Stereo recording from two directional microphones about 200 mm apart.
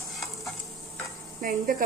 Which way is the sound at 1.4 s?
40° right (ahead or behind).